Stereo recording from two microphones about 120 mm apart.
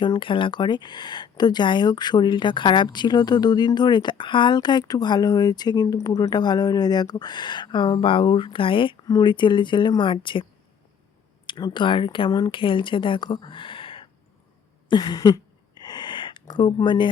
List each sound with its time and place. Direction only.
0.0 s speech: 45° left (ahead or behind)
11.4 s speech: 40° left (ahead or behind)
14.8 s speech: 35° left (ahead or behind)
15.8 s gasp: 35° left (ahead or behind)